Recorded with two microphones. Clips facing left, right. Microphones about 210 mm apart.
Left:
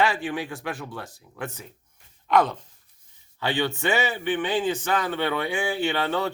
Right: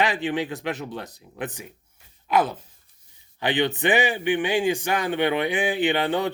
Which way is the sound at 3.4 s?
20° right (ahead or behind).